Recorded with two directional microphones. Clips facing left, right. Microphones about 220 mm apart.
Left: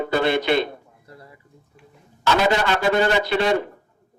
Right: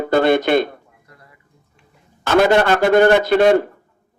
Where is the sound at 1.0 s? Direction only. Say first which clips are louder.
Left 5 dB; 30° left (ahead or behind).